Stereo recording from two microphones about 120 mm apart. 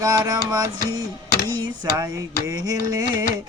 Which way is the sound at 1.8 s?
30° right (ahead or behind).